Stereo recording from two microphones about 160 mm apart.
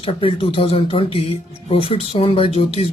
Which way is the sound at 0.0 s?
35° left (ahead or behind).